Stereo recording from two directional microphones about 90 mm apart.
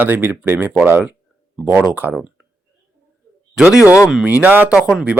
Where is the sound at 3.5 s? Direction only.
5° right (ahead or behind).